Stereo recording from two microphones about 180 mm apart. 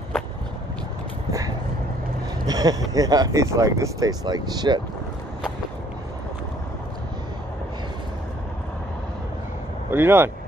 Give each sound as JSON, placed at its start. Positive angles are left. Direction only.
{"t": 2.4, "sound": "speech", "side_deg": -20}
{"t": 9.8, "sound": "speech", "side_deg": -10}